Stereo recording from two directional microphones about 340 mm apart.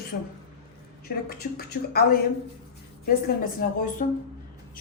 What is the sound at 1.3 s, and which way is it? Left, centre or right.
Speech, left.